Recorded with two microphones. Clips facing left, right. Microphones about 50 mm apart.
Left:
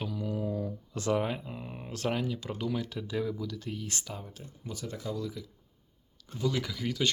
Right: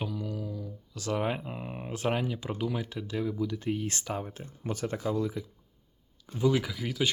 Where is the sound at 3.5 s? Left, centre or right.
Right.